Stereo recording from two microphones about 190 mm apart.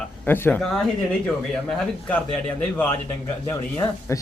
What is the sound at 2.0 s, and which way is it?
Speech, 5° left (ahead or behind).